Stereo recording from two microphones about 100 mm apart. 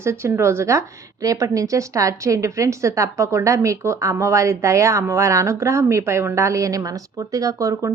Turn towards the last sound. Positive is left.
turn(degrees=-35)  # may be behind; listen again after turning